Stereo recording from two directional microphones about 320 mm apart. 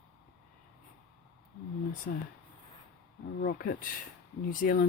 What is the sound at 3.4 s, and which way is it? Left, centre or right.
Speech, left.